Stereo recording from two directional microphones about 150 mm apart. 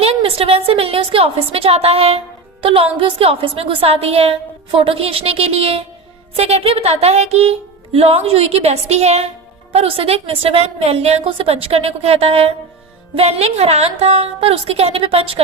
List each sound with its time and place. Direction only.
0.0 s a woman's voice: 40° right (ahead or behind)